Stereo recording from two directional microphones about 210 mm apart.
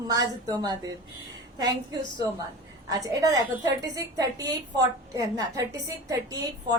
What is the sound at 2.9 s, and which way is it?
A woman's voice, 15° right (ahead or behind).